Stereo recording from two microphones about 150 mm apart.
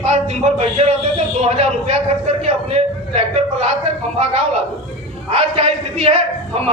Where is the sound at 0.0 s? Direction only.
50° right (ahead or behind).